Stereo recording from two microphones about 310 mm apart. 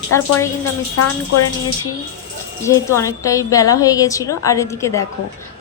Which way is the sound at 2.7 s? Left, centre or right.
Centre.